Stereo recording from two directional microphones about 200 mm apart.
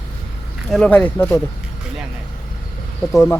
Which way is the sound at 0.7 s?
5° left (ahead or behind).